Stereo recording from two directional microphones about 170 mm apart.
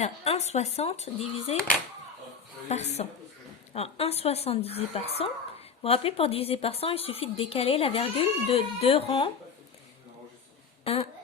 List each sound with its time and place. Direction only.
0.0 s speech: 40° left (ahead or behind)
2.6 s speech: 40° left (ahead or behind)
10.8 s speech: 35° left (ahead or behind)